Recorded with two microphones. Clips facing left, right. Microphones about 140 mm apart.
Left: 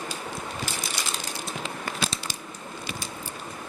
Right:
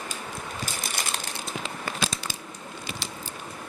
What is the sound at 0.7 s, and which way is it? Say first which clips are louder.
Crushing: left 1 dB; 40° right (ahead or behind).